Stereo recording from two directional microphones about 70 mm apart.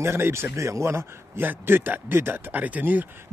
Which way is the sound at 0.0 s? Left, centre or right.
Right.